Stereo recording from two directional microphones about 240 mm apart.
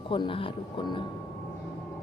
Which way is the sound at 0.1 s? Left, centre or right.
Left.